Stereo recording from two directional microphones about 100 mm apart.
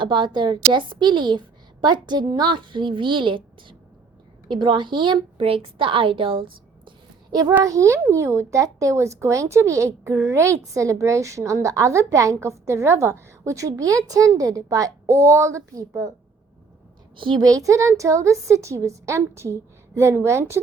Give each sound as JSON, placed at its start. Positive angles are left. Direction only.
{"t": 0.0, "sound": "a woman's voice", "side_deg": -55}
{"t": 5.4, "sound": "speech", "side_deg": -70}
{"t": 7.6, "sound": "a woman's voice", "side_deg": -30}
{"t": 17.2, "sound": "a woman's voice", "side_deg": -55}
{"t": 17.4, "sound": "a woman's voice", "side_deg": -35}